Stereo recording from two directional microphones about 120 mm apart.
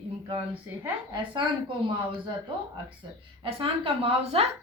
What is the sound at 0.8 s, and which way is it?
Speech, 40° right (ahead or behind).